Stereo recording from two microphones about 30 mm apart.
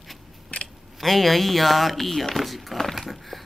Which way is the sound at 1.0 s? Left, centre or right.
Centre.